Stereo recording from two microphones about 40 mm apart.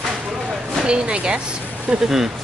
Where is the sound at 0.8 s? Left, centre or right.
Right.